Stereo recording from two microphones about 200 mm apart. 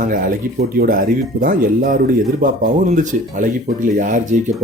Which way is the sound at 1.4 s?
45° right (ahead or behind).